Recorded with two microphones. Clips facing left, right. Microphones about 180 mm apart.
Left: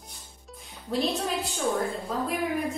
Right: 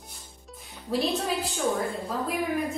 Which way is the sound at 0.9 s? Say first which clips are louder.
Right 1 dB; centre (ahead or behind).